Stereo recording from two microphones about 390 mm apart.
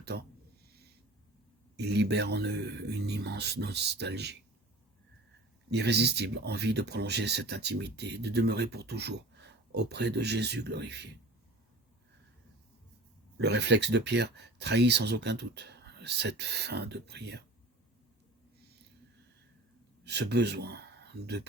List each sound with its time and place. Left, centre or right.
0.0 s speech: right
1.7 s speech: right
5.7 s speech: right
13.4 s speech: right
20.1 s speech: right